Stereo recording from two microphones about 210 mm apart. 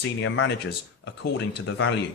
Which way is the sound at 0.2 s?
60° left (ahead or behind).